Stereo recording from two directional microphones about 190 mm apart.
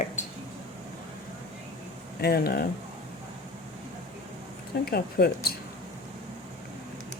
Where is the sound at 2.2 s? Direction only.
55° left (ahead or behind).